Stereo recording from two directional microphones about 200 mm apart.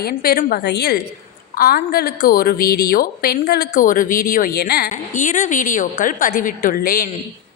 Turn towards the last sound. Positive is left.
turn(degrees=50)  # may be behind; listen again after turning